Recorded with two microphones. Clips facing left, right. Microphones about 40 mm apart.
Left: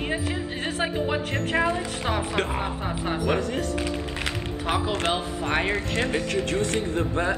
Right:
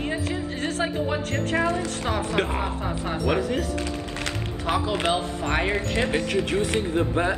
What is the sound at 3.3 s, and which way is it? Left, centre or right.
Speech, centre.